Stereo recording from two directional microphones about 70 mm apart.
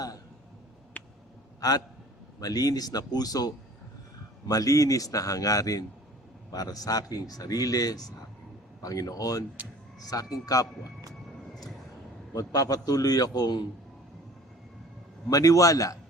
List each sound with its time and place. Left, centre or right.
1.6 s a man's voice: left
9.6 s speech: right
10.1 s speech: left
12.3 s speech: left
15.3 s speech: left